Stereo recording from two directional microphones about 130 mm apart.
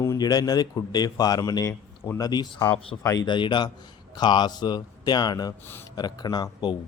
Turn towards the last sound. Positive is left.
turn(degrees=30)  # may be behind; listen again after turning